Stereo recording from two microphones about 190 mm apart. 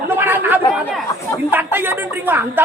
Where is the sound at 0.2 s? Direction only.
10° right (ahead or behind).